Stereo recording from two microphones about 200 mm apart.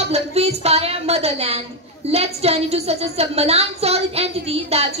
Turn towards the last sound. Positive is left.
turn(degrees=-30)  # may be behind; listen again after turning